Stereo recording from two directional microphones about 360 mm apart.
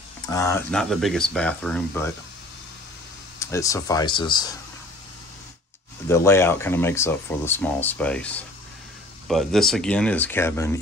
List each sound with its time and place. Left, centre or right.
0.3 s speech: centre
3.3 s speech: centre
6.0 s speech: centre